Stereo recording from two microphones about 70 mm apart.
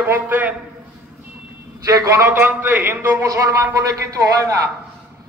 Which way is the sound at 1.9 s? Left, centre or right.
Right.